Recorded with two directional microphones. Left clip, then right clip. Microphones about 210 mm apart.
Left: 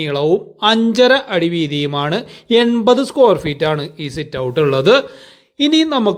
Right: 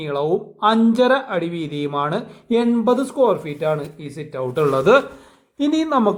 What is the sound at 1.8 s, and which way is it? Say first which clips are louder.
Speech: right 1 dB; 60° left (ahead or behind).